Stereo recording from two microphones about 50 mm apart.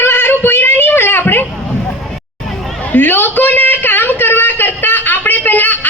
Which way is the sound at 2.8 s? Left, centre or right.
Left.